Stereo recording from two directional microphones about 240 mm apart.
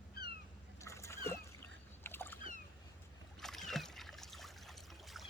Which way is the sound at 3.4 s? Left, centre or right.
Centre.